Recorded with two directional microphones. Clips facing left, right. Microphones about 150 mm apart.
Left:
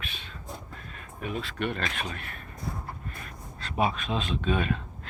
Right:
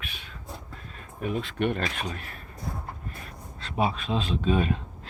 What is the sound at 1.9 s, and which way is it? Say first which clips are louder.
Speech: right 1 dB; 35° right (ahead or behind).